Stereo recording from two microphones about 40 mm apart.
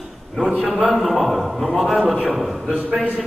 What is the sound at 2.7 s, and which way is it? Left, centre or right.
Speech, right.